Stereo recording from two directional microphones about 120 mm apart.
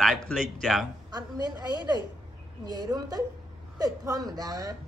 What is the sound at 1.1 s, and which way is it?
Speech, 35° right (ahead or behind).